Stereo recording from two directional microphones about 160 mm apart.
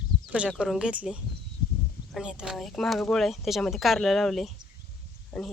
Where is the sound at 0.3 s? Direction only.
5° right (ahead or behind).